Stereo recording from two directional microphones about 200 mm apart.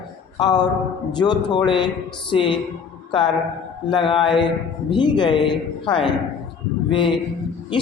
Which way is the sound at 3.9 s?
25° left (ahead or behind).